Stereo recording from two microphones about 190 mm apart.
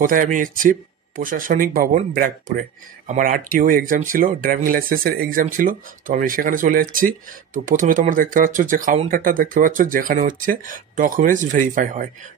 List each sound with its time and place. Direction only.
0.0 s speech: 45° right (ahead or behind)